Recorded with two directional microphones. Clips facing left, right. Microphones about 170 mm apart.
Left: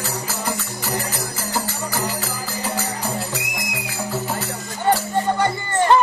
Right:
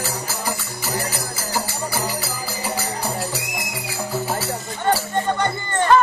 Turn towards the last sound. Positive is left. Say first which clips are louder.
# even
turn(degrees=15)  # may be behind; listen again after turning